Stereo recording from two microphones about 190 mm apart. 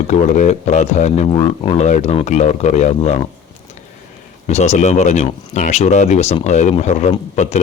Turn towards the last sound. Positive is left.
turn(degrees=35)  # may be behind; listen again after turning